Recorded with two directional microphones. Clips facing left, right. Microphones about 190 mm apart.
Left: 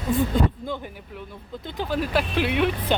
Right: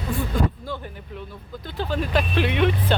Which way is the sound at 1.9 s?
10° left (ahead or behind).